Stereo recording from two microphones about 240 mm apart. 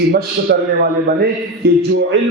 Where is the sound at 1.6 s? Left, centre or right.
Right.